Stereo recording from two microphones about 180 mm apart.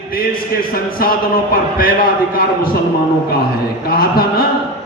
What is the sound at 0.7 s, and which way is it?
A man's voice, 55° left (ahead or behind).